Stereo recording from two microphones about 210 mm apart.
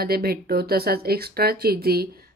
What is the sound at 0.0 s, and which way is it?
Speech, 45° right (ahead or behind).